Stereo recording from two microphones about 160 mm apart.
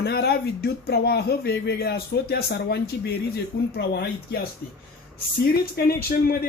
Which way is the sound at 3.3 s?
90° left.